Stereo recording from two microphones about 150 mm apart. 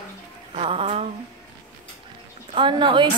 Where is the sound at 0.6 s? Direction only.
35° right (ahead or behind).